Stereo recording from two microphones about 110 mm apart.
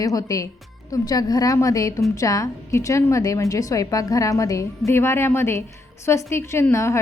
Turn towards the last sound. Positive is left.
turn(degrees=25)  # may be behind; listen again after turning